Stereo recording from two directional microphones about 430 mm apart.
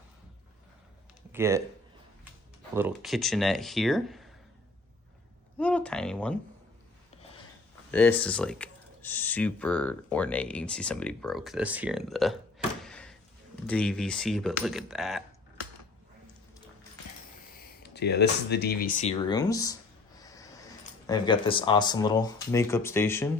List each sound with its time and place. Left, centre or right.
1.3 s speech: centre
2.7 s speech: centre
5.5 s speech: centre
7.9 s speech: centre
17.8 s speech: left; by 19.7 s centre
20.1 s a sound: centre
21.1 s speech: centre